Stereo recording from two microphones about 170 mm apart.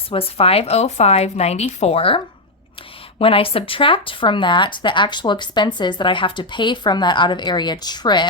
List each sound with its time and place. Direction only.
0.1 s speech: 35° left (ahead or behind)